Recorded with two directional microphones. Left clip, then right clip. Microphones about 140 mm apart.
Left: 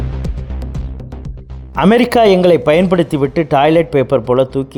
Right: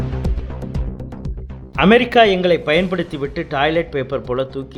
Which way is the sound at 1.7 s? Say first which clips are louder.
Left 1 dB; 90° left.